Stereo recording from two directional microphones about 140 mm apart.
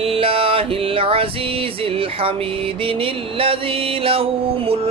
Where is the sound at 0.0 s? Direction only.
40° right (ahead or behind).